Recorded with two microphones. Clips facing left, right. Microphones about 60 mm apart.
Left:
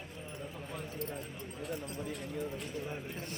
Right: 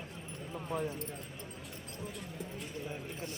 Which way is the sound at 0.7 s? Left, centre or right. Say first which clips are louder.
Right 9 dB; right.